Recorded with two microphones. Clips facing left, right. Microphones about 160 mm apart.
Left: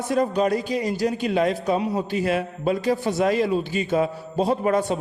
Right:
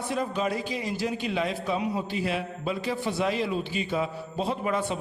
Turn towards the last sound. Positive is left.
turn(degrees=40)  # may be behind; listen again after turning